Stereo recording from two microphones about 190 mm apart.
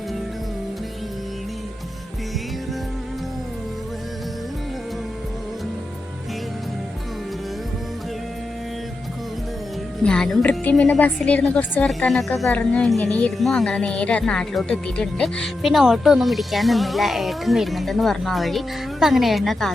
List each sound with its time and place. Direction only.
10.0 s a woman's voice: 5° left (ahead or behind)